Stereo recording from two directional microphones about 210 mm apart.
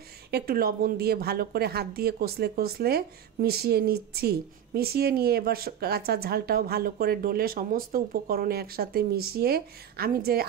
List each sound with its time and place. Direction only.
0.3 s a woman's voice: 45° right (ahead or behind)